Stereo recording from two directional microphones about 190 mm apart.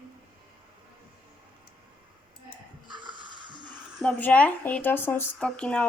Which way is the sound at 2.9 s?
25° right (ahead or behind).